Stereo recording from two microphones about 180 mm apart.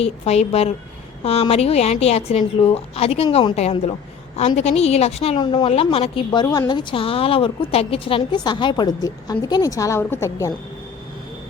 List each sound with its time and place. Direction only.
0.0 s a woman's voice: 35° left (ahead or behind); by 10.5 s 15° left (ahead or behind)